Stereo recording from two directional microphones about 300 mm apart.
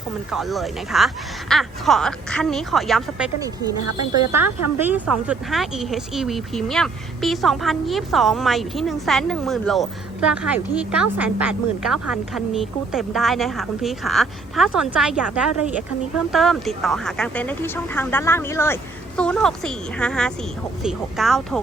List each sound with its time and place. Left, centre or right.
0.3 s speech: centre
3.4 s speech: centre
3.8 s speech: right
4.8 s speech: centre